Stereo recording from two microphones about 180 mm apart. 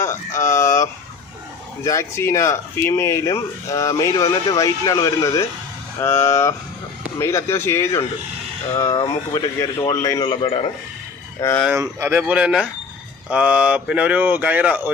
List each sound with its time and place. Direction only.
0.0 s speech: 15° left (ahead or behind)
1.8 s a man's voice: 15° left (ahead or behind)
10.3 s a man's voice: 35° left (ahead or behind)
11.7 s speech: 15° right (ahead or behind)